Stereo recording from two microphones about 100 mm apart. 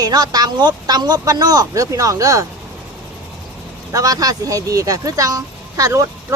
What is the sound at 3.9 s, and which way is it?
Speech, 35° right (ahead or behind).